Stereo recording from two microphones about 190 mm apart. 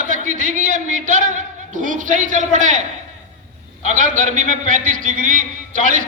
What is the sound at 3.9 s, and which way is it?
A man's voice, 40° right (ahead or behind).